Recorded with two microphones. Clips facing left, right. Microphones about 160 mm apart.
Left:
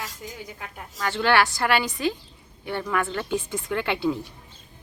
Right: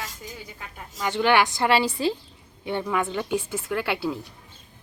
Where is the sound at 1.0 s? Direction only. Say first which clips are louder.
Right 1 dB; 15° right (ahead or behind).